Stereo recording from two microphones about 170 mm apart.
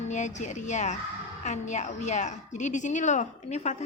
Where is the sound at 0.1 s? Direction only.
45° left (ahead or behind).